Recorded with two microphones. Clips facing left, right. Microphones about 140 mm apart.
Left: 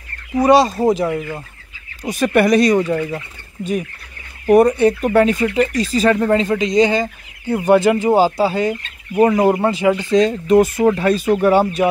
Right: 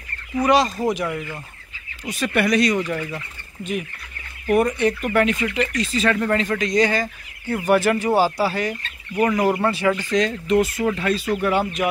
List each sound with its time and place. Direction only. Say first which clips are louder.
0.4 s speech: left 6 dB; 30° left (ahead or behind)
2.0 s speech: left 7 dB; 45° left (ahead or behind); by 10.3 s 25° left (ahead or behind)
10.4 s speech: left 7 dB; 45° left (ahead or behind)